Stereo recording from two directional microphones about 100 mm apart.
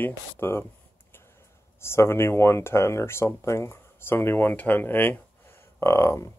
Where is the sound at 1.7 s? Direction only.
25° left (ahead or behind).